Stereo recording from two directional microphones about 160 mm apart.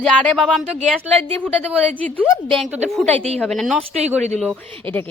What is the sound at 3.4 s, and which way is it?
Speech, centre (ahead or behind).